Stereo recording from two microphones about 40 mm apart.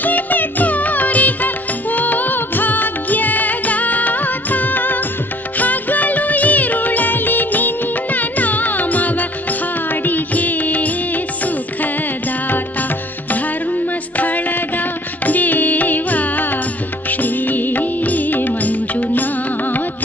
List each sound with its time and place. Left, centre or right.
0.0 s music: left
5.6 s music of bollywood: left
13.3 s music: left